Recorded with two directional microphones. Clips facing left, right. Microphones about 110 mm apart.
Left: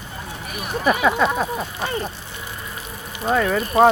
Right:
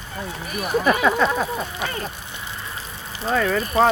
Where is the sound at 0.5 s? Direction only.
5° left (ahead or behind).